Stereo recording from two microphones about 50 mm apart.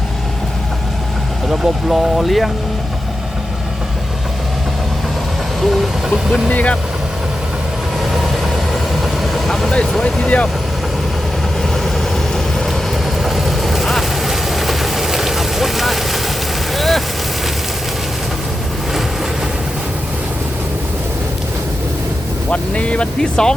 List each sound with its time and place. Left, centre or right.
1.5 s speech: centre
5.6 s vehicle: centre
6.5 s speech: left
8.1 s vehicle: centre
10.2 s speech: left
12.3 s vehicle: centre
13.2 s vehicle: centre
22.4 s speech: left